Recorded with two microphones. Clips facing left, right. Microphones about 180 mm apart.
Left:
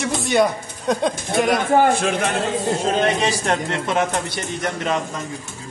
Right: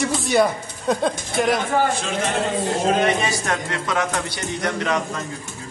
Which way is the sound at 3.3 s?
25° left (ahead or behind).